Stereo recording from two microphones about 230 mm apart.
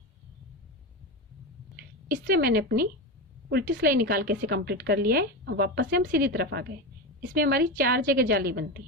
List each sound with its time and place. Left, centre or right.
2.0 s a woman's voice: right